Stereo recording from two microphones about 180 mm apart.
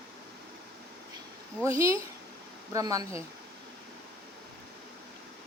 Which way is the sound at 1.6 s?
15° right (ahead or behind).